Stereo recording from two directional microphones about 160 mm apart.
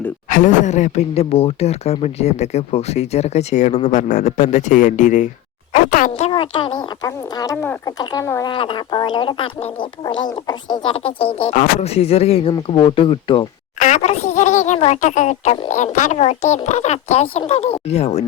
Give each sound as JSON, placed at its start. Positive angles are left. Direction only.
{"t": 0.3, "sound": "speech", "side_deg": 55}
{"t": 6.2, "sound": "speech", "side_deg": 35}
{"t": 8.5, "sound": "speech", "side_deg": 30}
{"t": 13.7, "sound": "speech", "side_deg": 50}